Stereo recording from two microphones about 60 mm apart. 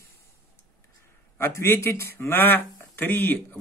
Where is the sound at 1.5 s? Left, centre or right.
Left.